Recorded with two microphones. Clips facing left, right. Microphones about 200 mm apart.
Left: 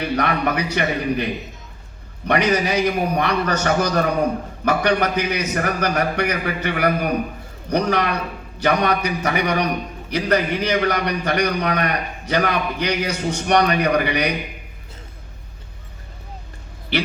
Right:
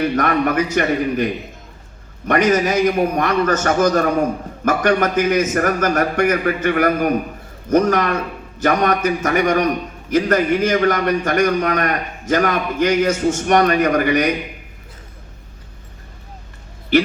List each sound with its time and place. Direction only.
0.0 s a man's voice: 50° right (ahead or behind)